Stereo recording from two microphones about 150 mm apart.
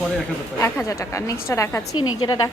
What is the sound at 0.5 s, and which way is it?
A woman's voice, 20° left (ahead or behind).